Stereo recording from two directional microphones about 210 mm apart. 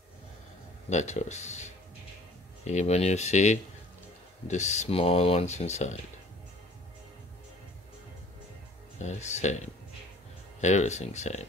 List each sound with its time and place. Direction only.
0.8 s speech: 35° left (ahead or behind)
9.0 s speech: 35° left (ahead or behind)
10.6 s speech: 35° left (ahead or behind)